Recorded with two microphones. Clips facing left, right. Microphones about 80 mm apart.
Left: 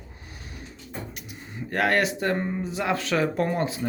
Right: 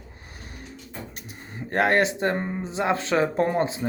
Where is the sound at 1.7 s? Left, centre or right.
Right.